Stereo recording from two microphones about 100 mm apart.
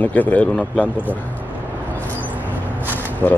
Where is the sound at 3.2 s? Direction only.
20° left (ahead or behind).